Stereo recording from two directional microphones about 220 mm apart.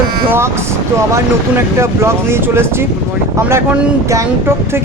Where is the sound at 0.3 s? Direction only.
10° right (ahead or behind).